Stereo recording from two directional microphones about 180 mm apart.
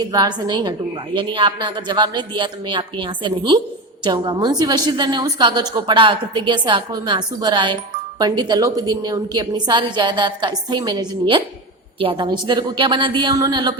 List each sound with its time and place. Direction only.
0.0 s a woman's voice: 20° right (ahead or behind)